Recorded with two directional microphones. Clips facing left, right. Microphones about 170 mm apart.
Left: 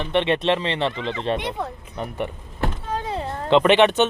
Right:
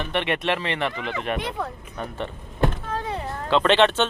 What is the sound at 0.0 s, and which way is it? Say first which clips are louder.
Speech: left 4 dB; 25° left (ahead or behind).